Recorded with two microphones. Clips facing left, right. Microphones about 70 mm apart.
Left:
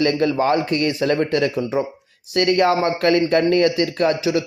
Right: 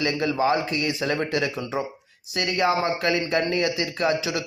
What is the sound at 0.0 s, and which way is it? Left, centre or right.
A man's voice, left.